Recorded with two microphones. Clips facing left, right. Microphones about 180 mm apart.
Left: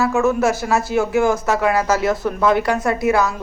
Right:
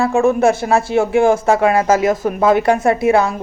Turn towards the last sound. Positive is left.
turn(degrees=-25)  # may be behind; listen again after turning